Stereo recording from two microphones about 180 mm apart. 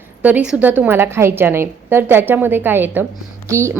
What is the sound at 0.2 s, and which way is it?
A woman's voice, 10° right (ahead or behind).